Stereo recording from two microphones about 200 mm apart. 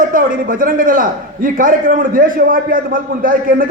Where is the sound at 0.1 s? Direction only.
45° right (ahead or behind).